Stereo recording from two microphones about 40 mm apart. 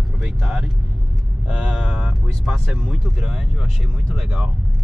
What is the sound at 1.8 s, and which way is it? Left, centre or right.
Speech, right.